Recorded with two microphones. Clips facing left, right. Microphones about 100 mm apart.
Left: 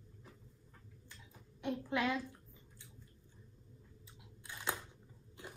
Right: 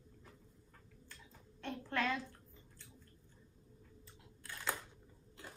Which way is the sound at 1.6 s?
15° left (ahead or behind).